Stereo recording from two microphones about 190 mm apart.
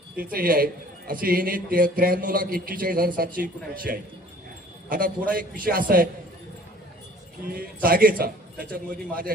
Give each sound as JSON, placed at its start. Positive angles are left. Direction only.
{"t": 0.2, "sound": "a man's voice", "side_deg": -50}
{"t": 7.4, "sound": "a man's voice", "side_deg": -50}